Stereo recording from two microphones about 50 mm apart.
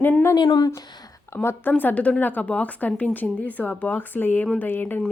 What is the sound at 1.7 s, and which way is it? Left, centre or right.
Speech, left.